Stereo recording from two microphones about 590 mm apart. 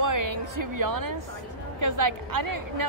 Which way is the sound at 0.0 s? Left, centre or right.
Right.